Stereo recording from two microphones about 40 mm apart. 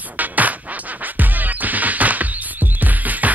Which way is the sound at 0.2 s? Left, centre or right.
Right.